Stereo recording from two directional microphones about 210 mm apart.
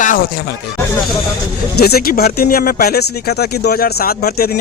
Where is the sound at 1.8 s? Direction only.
50° left (ahead or behind).